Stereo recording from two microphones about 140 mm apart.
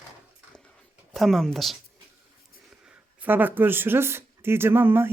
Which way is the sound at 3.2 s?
15° right (ahead or behind).